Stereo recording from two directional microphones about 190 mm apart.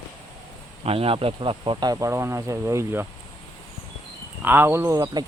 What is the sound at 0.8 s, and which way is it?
Speech, 30° right (ahead or behind).